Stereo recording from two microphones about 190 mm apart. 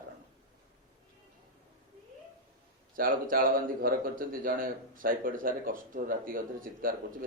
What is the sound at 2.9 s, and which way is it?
A man's voice, 45° right (ahead or behind).